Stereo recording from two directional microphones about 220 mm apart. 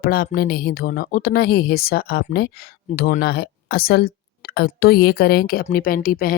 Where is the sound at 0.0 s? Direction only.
40° left (ahead or behind).